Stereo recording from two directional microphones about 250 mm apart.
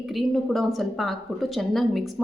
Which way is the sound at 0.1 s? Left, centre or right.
Centre.